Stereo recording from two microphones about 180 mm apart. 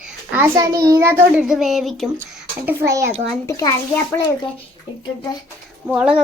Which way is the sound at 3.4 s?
15° left (ahead or behind).